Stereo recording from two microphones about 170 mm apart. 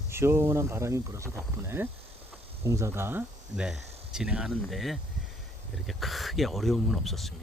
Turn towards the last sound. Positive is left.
turn(degrees=0)  # may be behind; listen again after turning